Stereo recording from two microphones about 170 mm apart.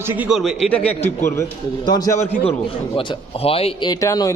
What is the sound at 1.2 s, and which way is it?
A man's voice, 20° left (ahead or behind).